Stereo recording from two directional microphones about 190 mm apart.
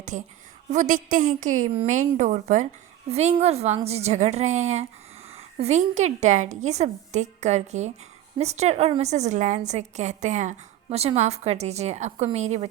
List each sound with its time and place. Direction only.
0.0 s a woman's voice: 40° right (ahead or behind)